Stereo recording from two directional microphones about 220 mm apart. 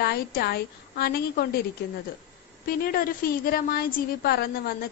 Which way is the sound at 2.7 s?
45° left (ahead or behind).